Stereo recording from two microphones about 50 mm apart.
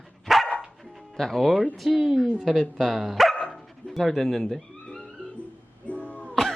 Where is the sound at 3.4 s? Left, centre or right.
Centre.